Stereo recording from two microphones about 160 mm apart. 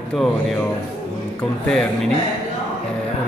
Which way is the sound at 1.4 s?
5° left (ahead or behind).